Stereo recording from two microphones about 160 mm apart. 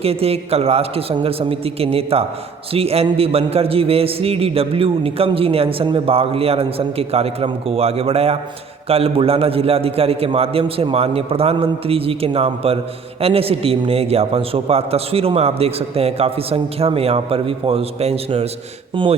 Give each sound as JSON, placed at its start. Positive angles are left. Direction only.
{"t": 0.0, "sound": "a man's voice", "side_deg": -40}